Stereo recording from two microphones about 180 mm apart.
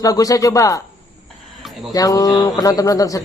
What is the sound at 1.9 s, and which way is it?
A man's voice, 20° left (ahead or behind).